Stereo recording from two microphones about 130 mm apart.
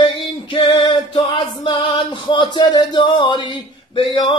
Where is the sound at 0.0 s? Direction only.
40° left (ahead or behind).